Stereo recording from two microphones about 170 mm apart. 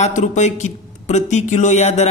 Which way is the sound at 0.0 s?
45° left (ahead or behind).